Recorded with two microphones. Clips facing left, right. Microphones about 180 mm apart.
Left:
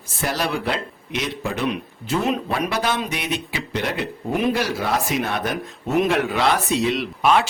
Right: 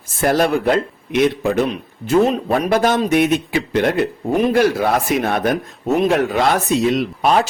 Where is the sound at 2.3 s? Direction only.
35° right (ahead or behind).